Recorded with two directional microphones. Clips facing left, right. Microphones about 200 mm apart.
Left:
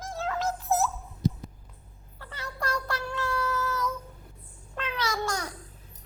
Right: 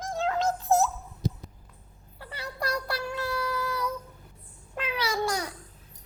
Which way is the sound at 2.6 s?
10° right (ahead or behind).